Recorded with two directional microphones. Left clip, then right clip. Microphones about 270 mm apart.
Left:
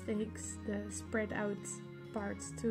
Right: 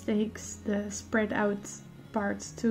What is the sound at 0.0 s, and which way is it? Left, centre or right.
A woman's voice, centre.